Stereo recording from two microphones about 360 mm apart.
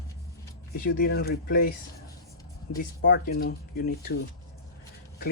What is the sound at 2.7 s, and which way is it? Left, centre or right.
Speech, left.